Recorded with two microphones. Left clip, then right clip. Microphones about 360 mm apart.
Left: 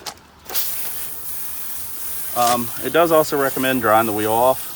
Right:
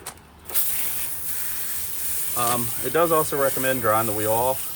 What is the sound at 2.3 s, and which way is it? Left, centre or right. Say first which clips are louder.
Speech: left 7 dB; centre.